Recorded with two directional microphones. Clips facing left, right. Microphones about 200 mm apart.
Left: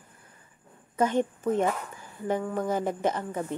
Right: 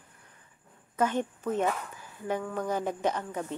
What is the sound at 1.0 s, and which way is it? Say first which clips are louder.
A woman's voice: left 3 dB; 10° left (ahead or behind).